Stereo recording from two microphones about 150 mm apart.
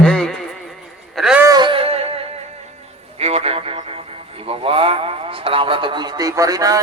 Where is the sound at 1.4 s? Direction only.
25° right (ahead or behind).